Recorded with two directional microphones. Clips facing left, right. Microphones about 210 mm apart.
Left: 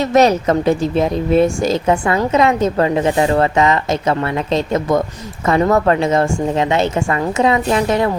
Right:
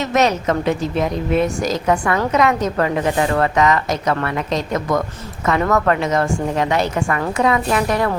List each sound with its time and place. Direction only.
0.0 s a woman's voice: 35° left (ahead or behind)